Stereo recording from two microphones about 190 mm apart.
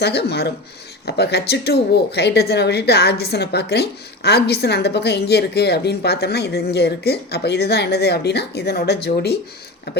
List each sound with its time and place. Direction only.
0.0 s speech: 60° left (ahead or behind)